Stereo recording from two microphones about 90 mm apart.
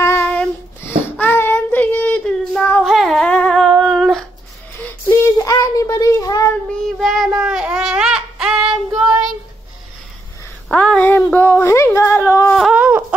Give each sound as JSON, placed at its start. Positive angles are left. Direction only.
{"t": 0.0, "sound": "child singing", "side_deg": 30}
{"t": 2.8, "sound": "music", "side_deg": 0}
{"t": 3.3, "sound": "humming", "side_deg": 10}
{"t": 3.9, "sound": "a sound", "side_deg": 5}
{"t": 5.0, "sound": "child singing", "side_deg": 30}
{"t": 6.8, "sound": "child singing", "side_deg": 0}
{"t": 7.3, "sound": "child singing", "side_deg": -10}
{"t": 10.7, "sound": "a sound", "side_deg": 15}
{"t": 12.7, "sound": "a sound", "side_deg": -15}